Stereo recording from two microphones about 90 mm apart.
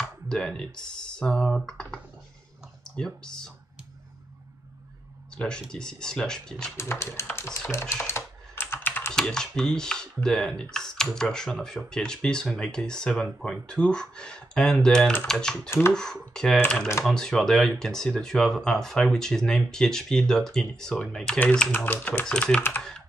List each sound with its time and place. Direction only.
0.3 s speech: 10° left (ahead or behind)
5.3 s speech: 10° left (ahead or behind)
6.8 s speech: 30° left (ahead or behind)
7.9 s computer keyboard: 30° left (ahead or behind)
9.1 s speech: 5° left (ahead or behind)
16.5 s speech: 20° left (ahead or behind)
17.0 s speech: 5° left (ahead or behind)
22.8 s typing: 5° left (ahead or behind)